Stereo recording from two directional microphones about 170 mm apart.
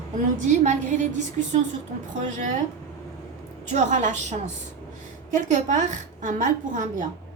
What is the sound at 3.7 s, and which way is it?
A woman's voice, 45° right (ahead or behind).